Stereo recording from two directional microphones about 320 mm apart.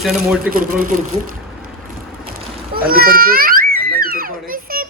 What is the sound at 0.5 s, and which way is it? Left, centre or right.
Speech, right.